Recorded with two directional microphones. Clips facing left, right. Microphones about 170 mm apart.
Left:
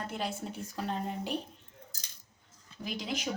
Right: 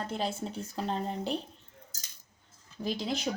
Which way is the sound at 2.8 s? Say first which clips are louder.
Right 4 dB; 30° right (ahead or behind).